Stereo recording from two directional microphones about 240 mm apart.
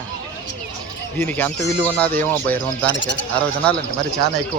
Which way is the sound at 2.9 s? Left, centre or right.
Left.